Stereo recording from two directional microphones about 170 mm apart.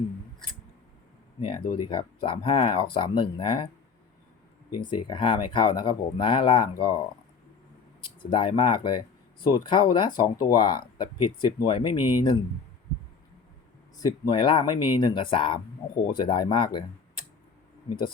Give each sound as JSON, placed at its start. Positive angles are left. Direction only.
{"t": 1.4, "sound": "speech", "side_deg": 30}
{"t": 4.8, "sound": "speech", "side_deg": 30}
{"t": 8.0, "sound": "speech", "side_deg": 30}
{"t": 13.9, "sound": "speech", "side_deg": 25}